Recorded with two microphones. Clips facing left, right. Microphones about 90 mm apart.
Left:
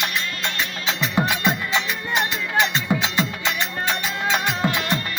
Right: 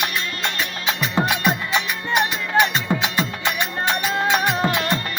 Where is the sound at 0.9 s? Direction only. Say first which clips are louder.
Right 1 dB; 15° right (ahead or behind).